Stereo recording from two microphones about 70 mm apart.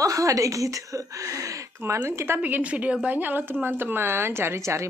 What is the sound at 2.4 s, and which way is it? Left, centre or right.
A woman's voice, right.